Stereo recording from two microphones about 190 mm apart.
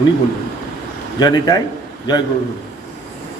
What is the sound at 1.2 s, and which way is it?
Speech, 20° left (ahead or behind).